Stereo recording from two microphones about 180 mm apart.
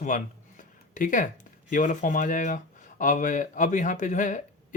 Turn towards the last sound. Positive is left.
turn(degrees=45)  # may be behind; listen again after turning